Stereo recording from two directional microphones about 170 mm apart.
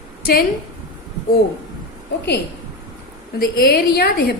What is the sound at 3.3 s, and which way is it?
A woman's voice, 65° left (ahead or behind).